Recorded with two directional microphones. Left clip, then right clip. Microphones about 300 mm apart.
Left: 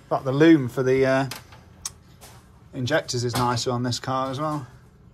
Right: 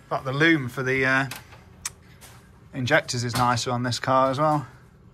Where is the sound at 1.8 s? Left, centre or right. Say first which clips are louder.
Even; centre.